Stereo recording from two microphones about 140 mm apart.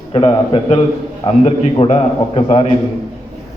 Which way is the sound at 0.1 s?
40° left (ahead or behind).